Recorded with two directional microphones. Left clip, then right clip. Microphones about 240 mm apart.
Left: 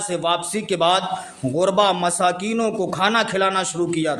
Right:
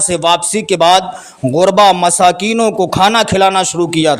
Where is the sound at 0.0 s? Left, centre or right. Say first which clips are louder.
Right 9 dB; right.